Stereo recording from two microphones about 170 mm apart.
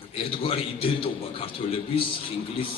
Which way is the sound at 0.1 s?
30° left (ahead or behind).